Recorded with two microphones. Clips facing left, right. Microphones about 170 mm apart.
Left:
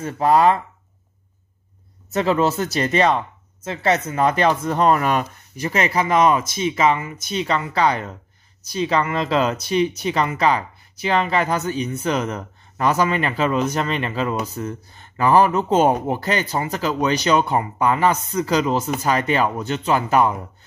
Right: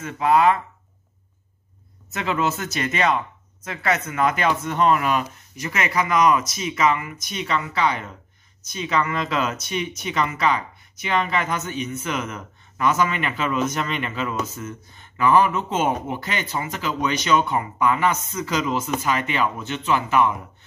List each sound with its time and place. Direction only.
0.0 s speech: 35° left (ahead or behind)
2.1 s speech: 35° left (ahead or behind)